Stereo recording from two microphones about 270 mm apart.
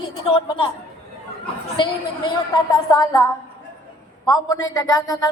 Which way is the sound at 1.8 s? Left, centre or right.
Centre.